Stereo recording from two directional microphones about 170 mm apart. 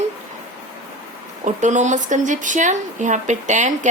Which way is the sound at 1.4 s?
45° right (ahead or behind).